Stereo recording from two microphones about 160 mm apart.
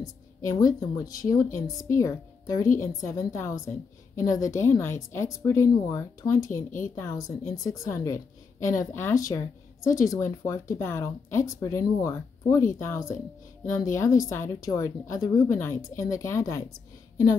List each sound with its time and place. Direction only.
0.0 s music: 20° left (ahead or behind)
0.7 s speech: 20° left (ahead or behind)